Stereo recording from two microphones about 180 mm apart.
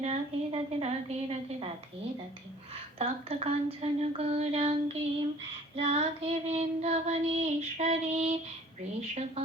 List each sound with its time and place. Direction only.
0.0 s a woman's voice: 35° right (ahead or behind)
3.0 s a sound: 35° right (ahead or behind)
5.7 s child singing: 35° right (ahead or behind)